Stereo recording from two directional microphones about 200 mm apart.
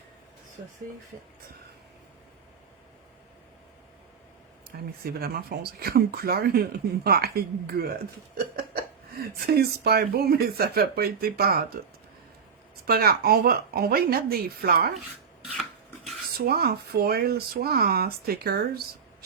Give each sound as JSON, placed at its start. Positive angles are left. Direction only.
{"t": 5.0, "sound": "speech", "side_deg": -50}
{"t": 12.9, "sound": "speech", "side_deg": -50}
{"t": 16.5, "sound": "speech", "side_deg": -50}